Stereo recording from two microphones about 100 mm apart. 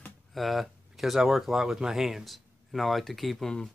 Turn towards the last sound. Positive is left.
turn(degrees=5)  # may be behind; listen again after turning